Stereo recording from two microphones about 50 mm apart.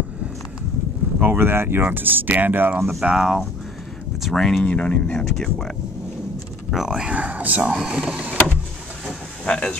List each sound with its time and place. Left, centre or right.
1.2 s speech: right
2.8 s speech: centre
4.3 s speech: centre
4.6 s speech: left
5.1 s speech: centre
6.7 s speech: centre
7.2 s power windows: right
7.7 s power windows: centre
9.4 s speech: centre